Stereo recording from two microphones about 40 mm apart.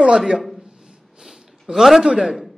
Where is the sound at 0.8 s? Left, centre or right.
Centre.